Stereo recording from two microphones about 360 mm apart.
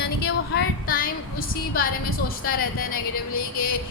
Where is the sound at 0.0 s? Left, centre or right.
Left.